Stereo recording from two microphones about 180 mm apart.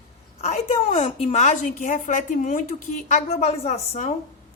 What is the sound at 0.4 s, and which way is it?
Speech, 35° left (ahead or behind).